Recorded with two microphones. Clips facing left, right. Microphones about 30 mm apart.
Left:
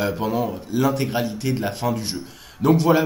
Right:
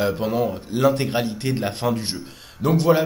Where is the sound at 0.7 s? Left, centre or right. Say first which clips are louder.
Right 2 dB; right.